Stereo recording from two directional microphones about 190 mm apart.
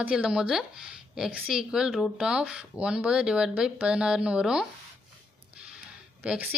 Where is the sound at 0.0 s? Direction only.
5° right (ahead or behind).